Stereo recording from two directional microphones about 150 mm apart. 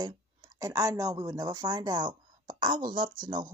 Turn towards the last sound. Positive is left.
turn(degrees=-30)  # may be behind; listen again after turning